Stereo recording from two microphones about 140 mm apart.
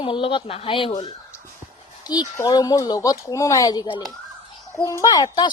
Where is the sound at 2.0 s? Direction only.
30° left (ahead or behind).